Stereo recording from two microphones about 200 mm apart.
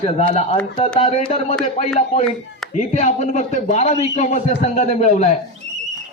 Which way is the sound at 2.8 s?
35° left (ahead or behind).